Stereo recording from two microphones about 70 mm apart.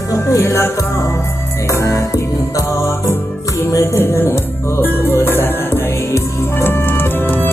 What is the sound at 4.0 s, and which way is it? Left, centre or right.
Speech, left.